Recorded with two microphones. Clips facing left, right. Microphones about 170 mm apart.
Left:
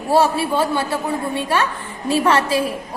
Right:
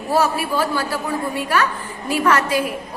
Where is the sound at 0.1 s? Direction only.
30° left (ahead or behind).